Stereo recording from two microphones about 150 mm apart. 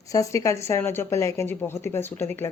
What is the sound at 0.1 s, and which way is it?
Speech, 20° left (ahead or behind).